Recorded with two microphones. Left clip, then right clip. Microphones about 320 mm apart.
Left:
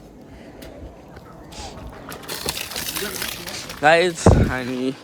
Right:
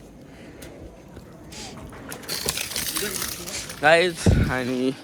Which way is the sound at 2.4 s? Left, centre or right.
Left.